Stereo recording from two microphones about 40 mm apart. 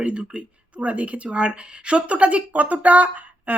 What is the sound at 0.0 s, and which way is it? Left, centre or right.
Speech, right.